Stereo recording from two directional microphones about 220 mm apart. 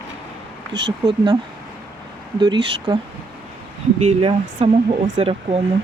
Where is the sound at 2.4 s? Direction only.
20° right (ahead or behind).